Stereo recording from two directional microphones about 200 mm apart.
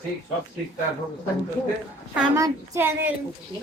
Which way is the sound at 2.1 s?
5° right (ahead or behind).